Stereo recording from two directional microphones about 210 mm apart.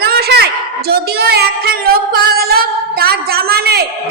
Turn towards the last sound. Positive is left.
turn(degrees=-50)  # may be behind; listen again after turning